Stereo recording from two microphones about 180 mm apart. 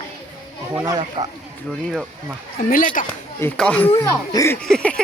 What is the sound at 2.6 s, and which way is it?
Speech, 50° left (ahead or behind).